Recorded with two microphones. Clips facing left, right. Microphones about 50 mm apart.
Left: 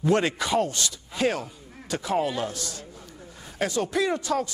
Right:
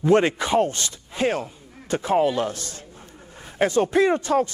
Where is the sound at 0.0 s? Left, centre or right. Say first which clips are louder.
Right 5 dB; right.